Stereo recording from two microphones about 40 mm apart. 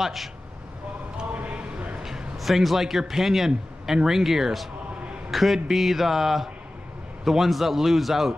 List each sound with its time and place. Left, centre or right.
0.0 s a man's voice: centre
1.3 s a sound: right
2.0 s a man's voice: centre